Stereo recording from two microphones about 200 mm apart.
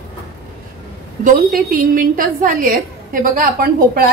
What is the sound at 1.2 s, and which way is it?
A woman's voice, 40° right (ahead or behind).